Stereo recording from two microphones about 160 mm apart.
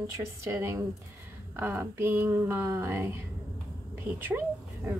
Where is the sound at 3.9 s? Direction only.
10° right (ahead or behind).